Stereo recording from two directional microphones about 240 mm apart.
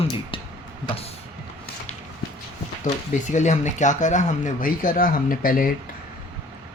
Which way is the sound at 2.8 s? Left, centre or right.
Left.